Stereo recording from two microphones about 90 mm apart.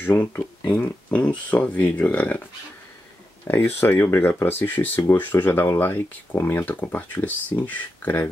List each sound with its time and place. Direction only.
0.0 s speech: 20° left (ahead or behind)
3.4 s speech: 25° left (ahead or behind)